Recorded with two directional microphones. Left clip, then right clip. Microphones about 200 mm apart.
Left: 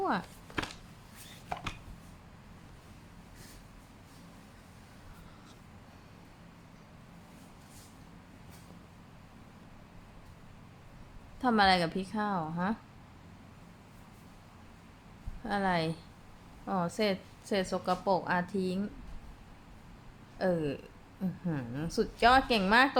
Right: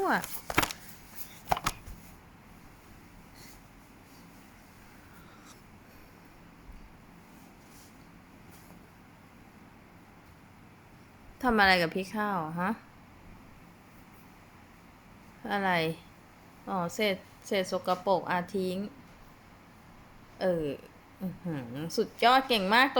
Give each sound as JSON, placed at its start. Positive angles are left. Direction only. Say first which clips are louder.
{"t": 1.5, "sound": "chopping", "louder": "right 9 dB", "side_deg": -50}
{"t": 11.3, "sound": "a woman's voice", "louder": "right 2 dB", "side_deg": -10}
{"t": 15.4, "sound": "a woman's voice", "louder": "right 2 dB", "side_deg": -10}
{"t": 20.4, "sound": "a woman's voice", "louder": "right 2 dB", "side_deg": -5}